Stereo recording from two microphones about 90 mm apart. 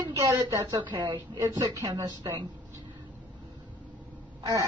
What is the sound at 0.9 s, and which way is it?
Speech, 55° right (ahead or behind).